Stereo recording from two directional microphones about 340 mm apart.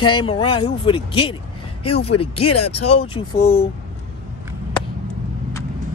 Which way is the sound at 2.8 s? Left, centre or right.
Centre.